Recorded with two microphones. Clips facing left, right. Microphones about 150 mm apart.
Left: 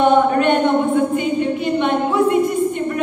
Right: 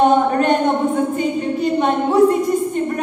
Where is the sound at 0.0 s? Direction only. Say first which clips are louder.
Even; 40° right (ahead or behind).